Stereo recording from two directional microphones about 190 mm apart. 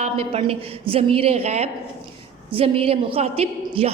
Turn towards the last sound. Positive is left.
turn(degrees=-30)  # may be behind; listen again after turning